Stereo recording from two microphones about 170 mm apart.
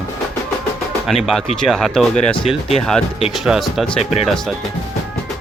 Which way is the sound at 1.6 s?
Centre (ahead or behind).